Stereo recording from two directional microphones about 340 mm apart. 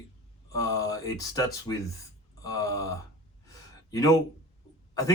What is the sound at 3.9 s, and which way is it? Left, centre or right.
Speech, centre.